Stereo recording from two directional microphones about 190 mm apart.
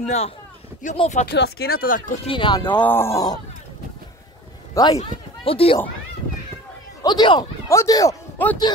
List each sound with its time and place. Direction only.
0.0 s speech: 35° left (ahead or behind)
1.2 s speech: 60° left (ahead or behind)
2.2 s speech: 25° left (ahead or behind)
2.8 s speech: 10° left (ahead or behind)
4.7 s speech: 20° left (ahead or behind)
5.4 s speech: 30° left (ahead or behind)
7.0 s speech: 25° left (ahead or behind)